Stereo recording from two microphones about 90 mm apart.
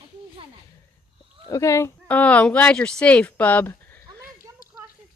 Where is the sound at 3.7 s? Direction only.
20° left (ahead or behind).